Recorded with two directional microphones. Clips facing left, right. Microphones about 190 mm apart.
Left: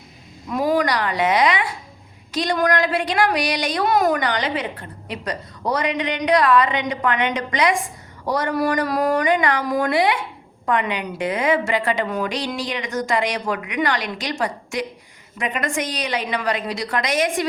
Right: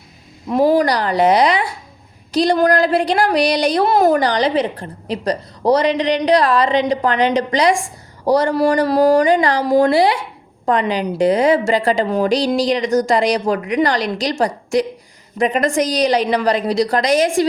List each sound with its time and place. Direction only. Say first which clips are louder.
0.4 s speech: right 6 dB; 30° right (ahead or behind)